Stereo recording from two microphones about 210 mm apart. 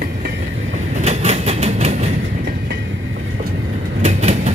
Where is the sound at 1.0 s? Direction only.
30° right (ahead or behind).